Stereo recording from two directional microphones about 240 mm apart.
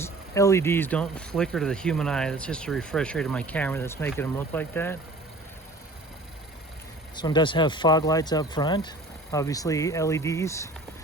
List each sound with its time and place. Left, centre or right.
0.0 s speech: centre
7.2 s speech: centre